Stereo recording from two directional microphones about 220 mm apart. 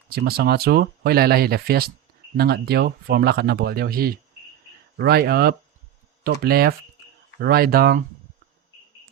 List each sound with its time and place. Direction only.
0.1 s speech: 45° right (ahead or behind)